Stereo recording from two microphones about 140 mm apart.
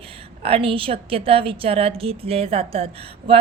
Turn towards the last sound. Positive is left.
turn(degrees=-45)  # may be behind; listen again after turning